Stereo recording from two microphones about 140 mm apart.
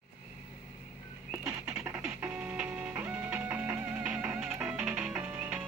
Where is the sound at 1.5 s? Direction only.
20° right (ahead or behind).